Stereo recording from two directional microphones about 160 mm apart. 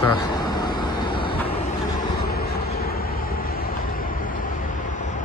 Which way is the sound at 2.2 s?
75° left (ahead or behind).